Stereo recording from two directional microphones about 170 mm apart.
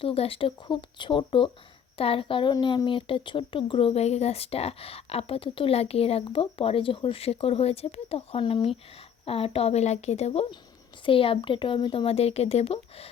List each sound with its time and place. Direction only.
0.0 s speech: 35° left (ahead or behind)